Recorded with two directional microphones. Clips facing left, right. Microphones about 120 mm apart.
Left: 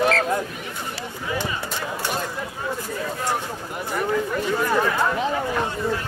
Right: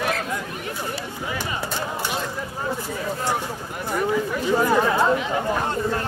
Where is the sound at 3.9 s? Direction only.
5° right (ahead or behind).